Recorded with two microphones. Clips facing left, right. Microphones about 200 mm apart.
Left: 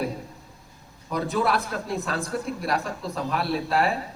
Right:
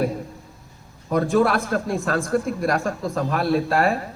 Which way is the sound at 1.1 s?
50° right (ahead or behind).